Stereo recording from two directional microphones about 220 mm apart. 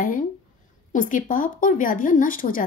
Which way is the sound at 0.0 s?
40° left (ahead or behind).